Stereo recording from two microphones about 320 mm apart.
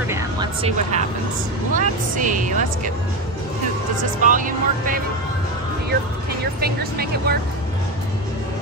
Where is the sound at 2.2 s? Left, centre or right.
Right.